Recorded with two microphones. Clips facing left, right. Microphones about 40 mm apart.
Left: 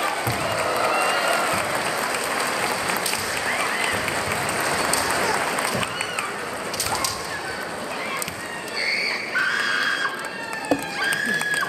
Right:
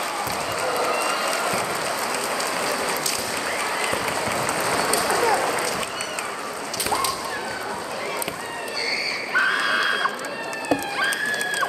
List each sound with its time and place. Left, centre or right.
0.8 s applause: centre
4.9 s a sound: centre
9.3 s whistle: centre